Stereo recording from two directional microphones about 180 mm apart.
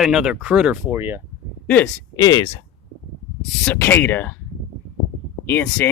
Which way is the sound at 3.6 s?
10° left (ahead or behind).